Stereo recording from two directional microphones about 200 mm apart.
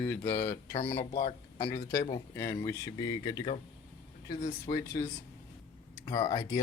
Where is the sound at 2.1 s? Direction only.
15° left (ahead or behind).